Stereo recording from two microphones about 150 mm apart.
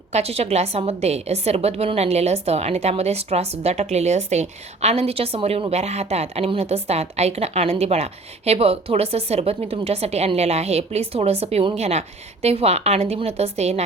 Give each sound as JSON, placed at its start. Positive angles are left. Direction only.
{"t": 0.1, "sound": "a woman's voice", "side_deg": -45}